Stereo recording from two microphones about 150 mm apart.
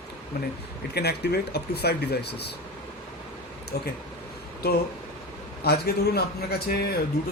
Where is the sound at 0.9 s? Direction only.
90° left.